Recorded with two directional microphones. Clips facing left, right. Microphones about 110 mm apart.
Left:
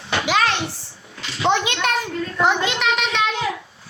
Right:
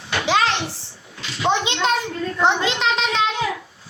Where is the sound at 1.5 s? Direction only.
25° right (ahead or behind).